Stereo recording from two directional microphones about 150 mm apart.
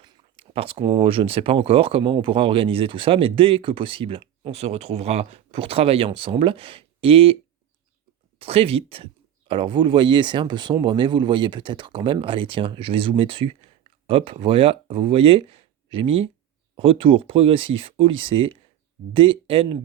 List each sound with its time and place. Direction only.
0.0 s speech: 35° right (ahead or behind)
8.4 s speech: 40° right (ahead or behind)